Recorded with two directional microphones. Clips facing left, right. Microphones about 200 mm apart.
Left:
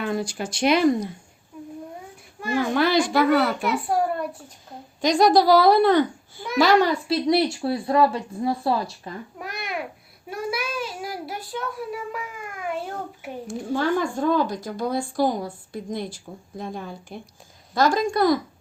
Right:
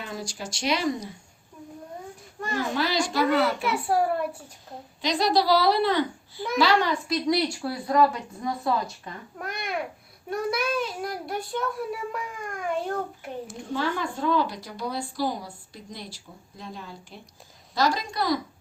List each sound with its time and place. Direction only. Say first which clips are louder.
0.0 s speech: left 8 dB; 55° left (ahead or behind)
2.7 s speech: left 6 dB; 55° left (ahead or behind)
4.9 s a woman's voice: left 6 dB; 45° left (ahead or behind)
7.1 s speech: left 4 dB; 25° left (ahead or behind)
9.4 s babbling: right 1 dB; centre (ahead or behind)
10.2 s a child's voice: right 2 dB; 5° left (ahead or behind)
13.7 s a woman's voice: left 5 dB; 45° left (ahead or behind)